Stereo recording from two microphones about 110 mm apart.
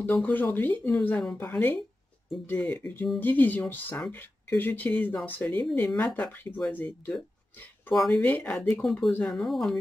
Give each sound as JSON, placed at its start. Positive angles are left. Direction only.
{"t": 0.2, "sound": "speech", "side_deg": 15}
{"t": 7.9, "sound": "speech", "side_deg": 0}
{"t": 8.2, "sound": "speech", "side_deg": 15}